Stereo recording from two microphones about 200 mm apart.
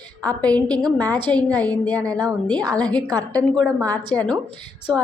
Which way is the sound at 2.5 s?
20° right (ahead or behind).